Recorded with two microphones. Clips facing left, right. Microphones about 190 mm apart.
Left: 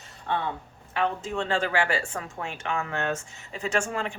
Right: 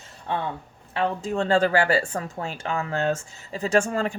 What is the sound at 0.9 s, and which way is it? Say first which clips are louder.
Speech: right 2 dB; 35° right (ahead or behind).